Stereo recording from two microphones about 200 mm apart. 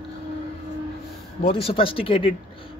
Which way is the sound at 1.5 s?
25° left (ahead or behind).